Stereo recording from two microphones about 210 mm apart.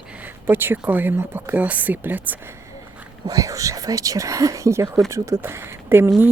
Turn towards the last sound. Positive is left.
turn(degrees=-10)  # may be behind; listen again after turning